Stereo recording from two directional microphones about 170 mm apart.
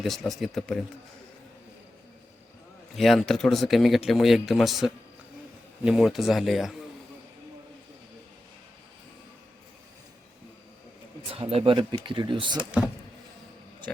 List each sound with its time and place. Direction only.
0.0 s speech: centre (ahead or behind)
2.9 s speech: centre (ahead or behind)
11.3 s speech: 35° right (ahead or behind)